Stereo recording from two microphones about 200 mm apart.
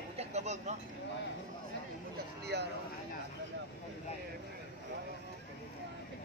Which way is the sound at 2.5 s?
55° right (ahead or behind).